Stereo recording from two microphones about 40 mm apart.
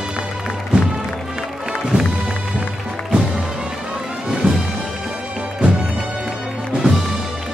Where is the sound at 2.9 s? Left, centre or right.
Centre.